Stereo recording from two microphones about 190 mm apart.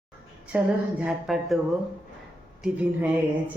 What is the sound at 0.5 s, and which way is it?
A man's voice, 5° right (ahead or behind).